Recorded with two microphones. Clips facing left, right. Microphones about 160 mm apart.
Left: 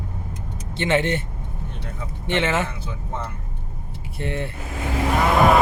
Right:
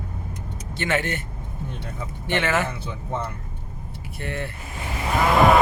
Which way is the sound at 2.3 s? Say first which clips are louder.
Left 1 dB; 25° left (ahead or behind).